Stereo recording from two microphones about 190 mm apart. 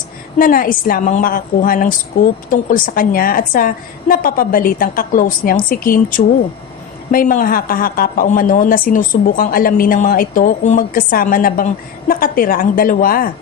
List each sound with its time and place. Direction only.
0.3 s a woman's voice: 50° left (ahead or behind)